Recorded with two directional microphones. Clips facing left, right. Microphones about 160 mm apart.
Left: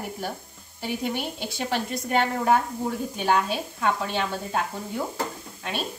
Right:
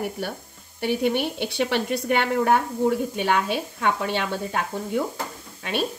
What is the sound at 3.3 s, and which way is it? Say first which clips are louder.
Speech: right 1 dB; 65° right (ahead or behind).